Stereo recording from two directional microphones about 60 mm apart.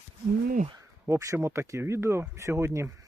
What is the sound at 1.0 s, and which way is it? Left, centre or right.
Speech, right.